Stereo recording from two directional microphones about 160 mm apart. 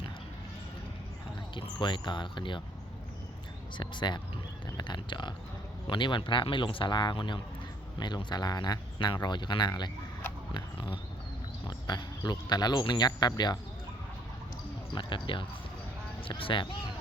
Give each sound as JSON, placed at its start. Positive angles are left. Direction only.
{"t": 1.8, "sound": "speech", "side_deg": 30}
{"t": 3.8, "sound": "speech", "side_deg": 30}
{"t": 14.9, "sound": "speech", "side_deg": 30}